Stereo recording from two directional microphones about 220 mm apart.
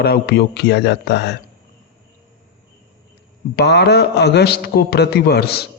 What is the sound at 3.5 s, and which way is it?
A man's voice, 50° left (ahead or behind).